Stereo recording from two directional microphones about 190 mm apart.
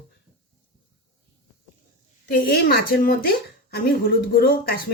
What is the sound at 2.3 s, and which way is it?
A woman's voice, 55° left (ahead or behind).